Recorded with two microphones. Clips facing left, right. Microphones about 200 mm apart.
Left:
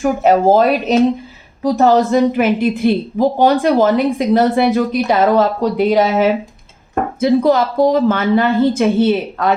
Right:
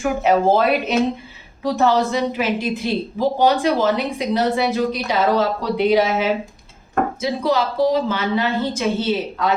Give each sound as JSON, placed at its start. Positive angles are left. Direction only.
{"t": 0.0, "sound": "a woman's voice", "side_deg": 40}